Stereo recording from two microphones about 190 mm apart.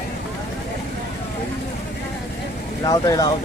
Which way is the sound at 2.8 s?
20° left (ahead or behind).